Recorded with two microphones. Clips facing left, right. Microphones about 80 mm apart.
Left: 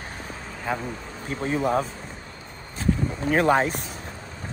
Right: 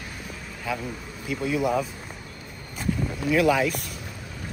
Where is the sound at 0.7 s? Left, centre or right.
Left.